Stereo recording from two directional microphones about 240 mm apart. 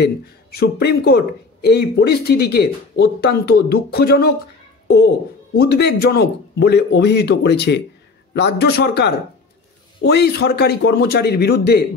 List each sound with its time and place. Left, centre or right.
0.0 s speech: left